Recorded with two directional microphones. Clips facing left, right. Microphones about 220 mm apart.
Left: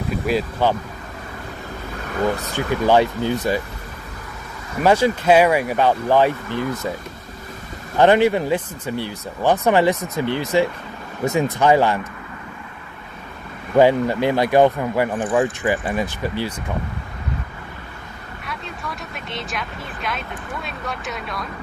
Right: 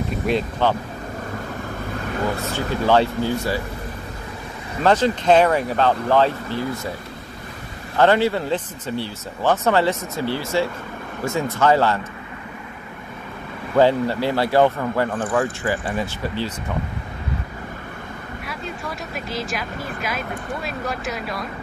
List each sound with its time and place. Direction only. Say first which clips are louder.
0.3 s speech: left 1 dB; 10° left (ahead or behind)
2.4 s speech: left 2 dB; 15° left (ahead or behind)
4.7 s speech: left 1 dB; 10° left (ahead or behind)
8.0 s speech: left 3 dB; 15° left (ahead or behind)
13.7 s speech: left 2 dB; 15° left (ahead or behind)
18.4 s speech: even; centre (ahead or behind)